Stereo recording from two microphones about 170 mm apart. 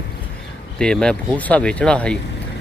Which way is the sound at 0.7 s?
5° left (ahead or behind).